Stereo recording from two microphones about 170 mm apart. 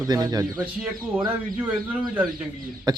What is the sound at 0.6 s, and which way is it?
Speech, 5° right (ahead or behind).